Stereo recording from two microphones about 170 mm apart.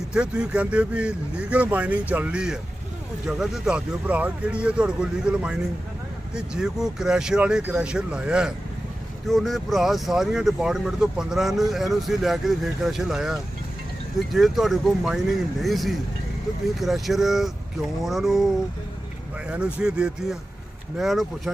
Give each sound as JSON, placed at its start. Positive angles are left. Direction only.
{"t": 0.1, "sound": "speech", "side_deg": -5}
{"t": 19.5, "sound": "speech", "side_deg": -5}